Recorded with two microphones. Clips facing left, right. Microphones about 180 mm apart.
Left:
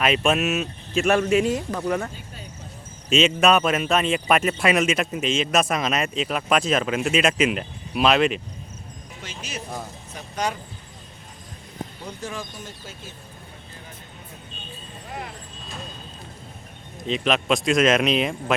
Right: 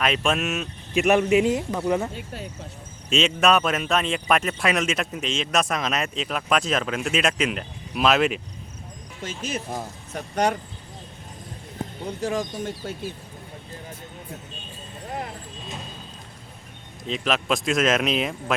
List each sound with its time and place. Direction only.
0.0 s speech: 5° left (ahead or behind)
0.9 s a man's voice: 15° right (ahead or behind)
3.1 s speech: centre (ahead or behind)
9.2 s speech: 50° right (ahead or behind)
17.1 s speech: centre (ahead or behind)